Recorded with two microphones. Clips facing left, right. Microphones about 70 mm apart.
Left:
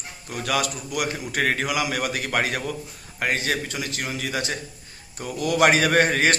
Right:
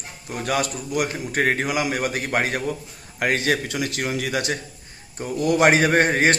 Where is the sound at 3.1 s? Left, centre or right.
Right.